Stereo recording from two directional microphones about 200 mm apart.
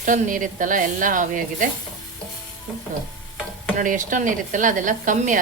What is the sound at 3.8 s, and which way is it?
A woman's voice, 40° right (ahead or behind).